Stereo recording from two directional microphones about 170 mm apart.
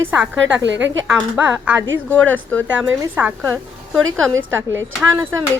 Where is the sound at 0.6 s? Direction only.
90° right.